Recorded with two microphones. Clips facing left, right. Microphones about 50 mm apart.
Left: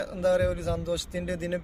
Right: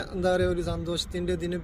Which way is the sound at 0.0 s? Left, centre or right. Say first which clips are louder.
Left 1 dB; left.